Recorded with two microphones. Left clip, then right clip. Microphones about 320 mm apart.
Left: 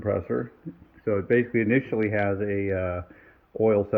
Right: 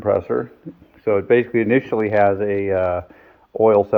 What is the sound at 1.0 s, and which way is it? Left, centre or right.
Speech, centre.